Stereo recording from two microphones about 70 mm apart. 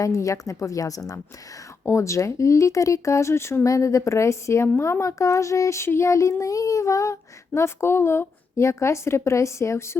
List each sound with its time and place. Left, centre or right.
0.0 s child singing: left
1.8 s child singing: left